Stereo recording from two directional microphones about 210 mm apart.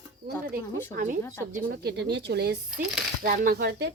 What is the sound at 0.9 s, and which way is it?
A woman's voice, 40° right (ahead or behind).